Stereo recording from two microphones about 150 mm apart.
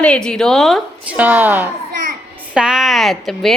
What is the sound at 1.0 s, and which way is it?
Speech, 10° right (ahead or behind).